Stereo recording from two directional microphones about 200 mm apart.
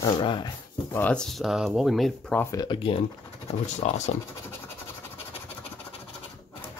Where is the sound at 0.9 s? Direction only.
10° left (ahead or behind).